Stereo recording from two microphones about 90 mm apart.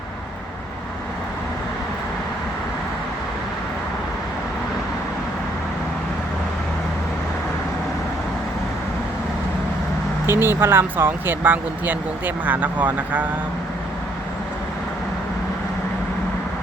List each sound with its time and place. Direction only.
10.2 s speech: 25° right (ahead or behind)